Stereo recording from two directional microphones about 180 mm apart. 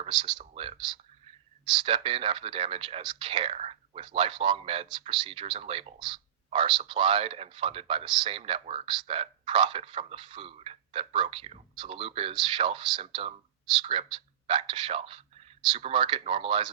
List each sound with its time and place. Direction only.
0.0 s speech: 25° right (ahead or behind)
1.8 s speech: 30° right (ahead or behind)
14.4 s speech: 30° right (ahead or behind)